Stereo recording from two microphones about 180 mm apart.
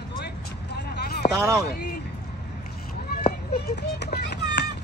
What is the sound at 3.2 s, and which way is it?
Run, 60° left (ahead or behind).